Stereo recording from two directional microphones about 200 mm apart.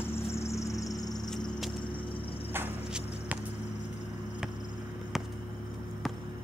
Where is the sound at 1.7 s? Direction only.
25° left (ahead or behind).